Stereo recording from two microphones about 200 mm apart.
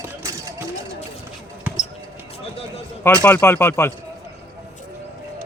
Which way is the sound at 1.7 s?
10° right (ahead or behind).